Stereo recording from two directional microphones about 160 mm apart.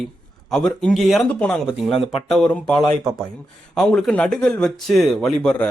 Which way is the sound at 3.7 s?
5° left (ahead or behind).